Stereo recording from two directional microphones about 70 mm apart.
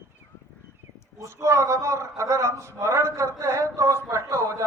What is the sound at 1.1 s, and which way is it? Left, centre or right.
A man's voice, right.